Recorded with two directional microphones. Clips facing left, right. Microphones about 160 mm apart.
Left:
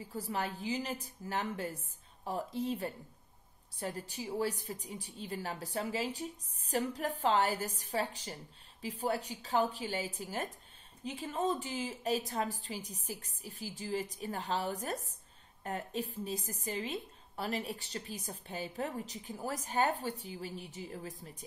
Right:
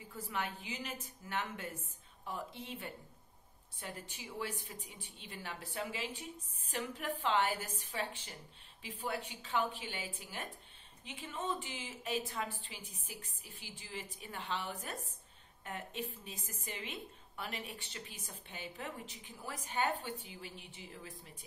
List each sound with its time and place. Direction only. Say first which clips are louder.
0.1 s a woman's voice: left 3 dB; 35° left (ahead or behind)